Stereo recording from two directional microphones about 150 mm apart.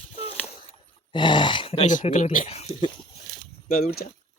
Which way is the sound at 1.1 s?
30° left (ahead or behind).